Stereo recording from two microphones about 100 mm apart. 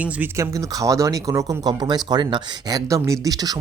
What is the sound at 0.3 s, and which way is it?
Speech, 35° right (ahead or behind).